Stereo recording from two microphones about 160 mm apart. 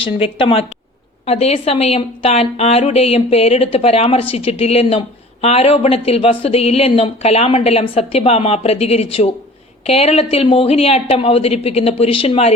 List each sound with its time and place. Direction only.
0.0 s speech: 35° left (ahead or behind)